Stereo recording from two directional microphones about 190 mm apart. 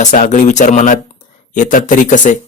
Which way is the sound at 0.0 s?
40° left (ahead or behind).